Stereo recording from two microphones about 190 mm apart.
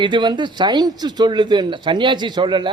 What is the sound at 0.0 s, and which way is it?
A man's voice, 25° right (ahead or behind).